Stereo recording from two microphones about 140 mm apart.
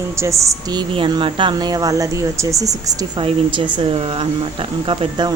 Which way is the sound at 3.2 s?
35° right (ahead or behind).